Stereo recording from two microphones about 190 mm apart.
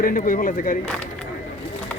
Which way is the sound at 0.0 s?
45° left (ahead or behind).